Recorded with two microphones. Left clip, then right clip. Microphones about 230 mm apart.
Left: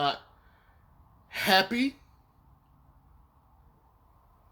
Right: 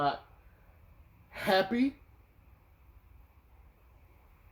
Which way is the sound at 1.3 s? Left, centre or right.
Left.